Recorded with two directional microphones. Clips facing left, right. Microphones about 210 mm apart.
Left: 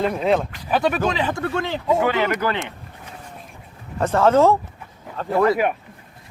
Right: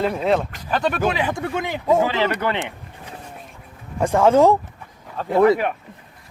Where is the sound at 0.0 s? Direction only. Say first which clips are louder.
Even; centre (ahead or behind).